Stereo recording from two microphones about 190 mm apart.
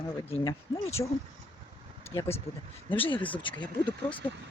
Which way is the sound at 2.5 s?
35° left (ahead or behind).